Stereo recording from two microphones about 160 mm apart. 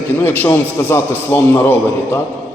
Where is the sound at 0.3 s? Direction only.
15° left (ahead or behind).